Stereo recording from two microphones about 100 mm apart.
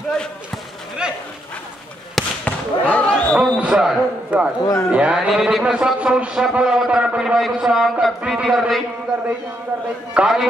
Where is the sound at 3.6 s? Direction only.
10° right (ahead or behind).